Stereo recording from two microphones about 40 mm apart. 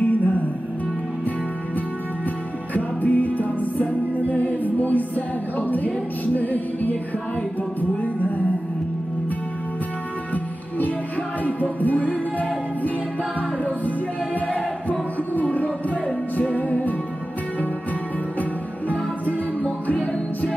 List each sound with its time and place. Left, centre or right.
0.0 s music: left
2.7 s music: left
11.8 s music: left
14.9 s music: left
19.2 s music: left